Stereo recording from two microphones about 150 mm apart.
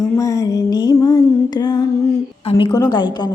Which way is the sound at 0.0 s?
20° left (ahead or behind).